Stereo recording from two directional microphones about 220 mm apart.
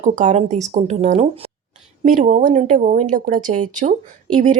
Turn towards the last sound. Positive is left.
turn(degrees=-35)  # may be behind; listen again after turning